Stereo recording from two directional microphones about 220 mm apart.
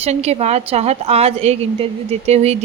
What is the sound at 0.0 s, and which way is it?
Speech, 30° right (ahead or behind).